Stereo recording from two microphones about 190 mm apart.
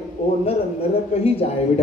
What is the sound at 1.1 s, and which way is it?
Speech, 30° left (ahead or behind).